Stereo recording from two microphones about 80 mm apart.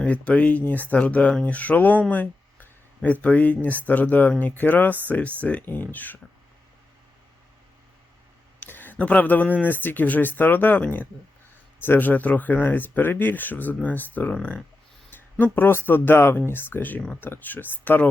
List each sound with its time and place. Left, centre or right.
0.0 s speech: centre
8.6 s a sound: left
9.6 s speech: left